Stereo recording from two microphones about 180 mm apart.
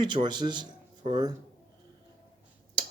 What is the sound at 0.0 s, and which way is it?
Speech, 25° right (ahead or behind).